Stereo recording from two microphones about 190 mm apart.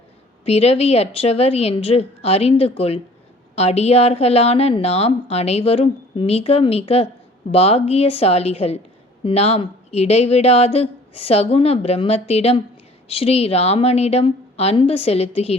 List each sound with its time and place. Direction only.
0.4 s a woman's voice: 35° left (ahead or behind)